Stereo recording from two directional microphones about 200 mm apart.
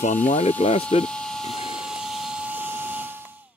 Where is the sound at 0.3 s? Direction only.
35° left (ahead or behind).